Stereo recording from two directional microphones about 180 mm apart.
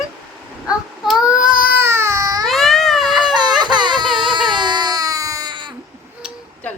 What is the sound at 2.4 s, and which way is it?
Cat, centre (ahead or behind).